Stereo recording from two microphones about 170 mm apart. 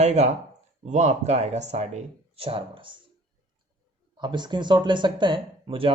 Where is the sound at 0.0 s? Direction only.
40° right (ahead or behind).